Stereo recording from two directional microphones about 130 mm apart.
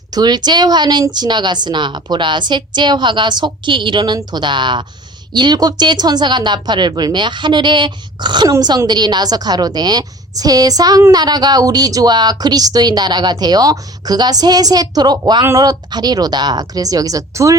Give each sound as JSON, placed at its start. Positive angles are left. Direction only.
{"t": 0.1, "sound": "a woman's voice", "side_deg": -30}